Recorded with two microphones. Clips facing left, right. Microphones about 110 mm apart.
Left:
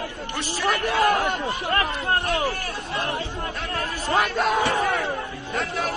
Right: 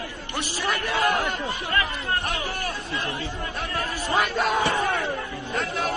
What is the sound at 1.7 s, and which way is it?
Speech, 50° left (ahead or behind).